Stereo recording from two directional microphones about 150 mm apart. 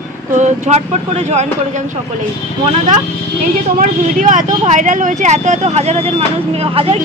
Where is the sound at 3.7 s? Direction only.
65° right (ahead or behind).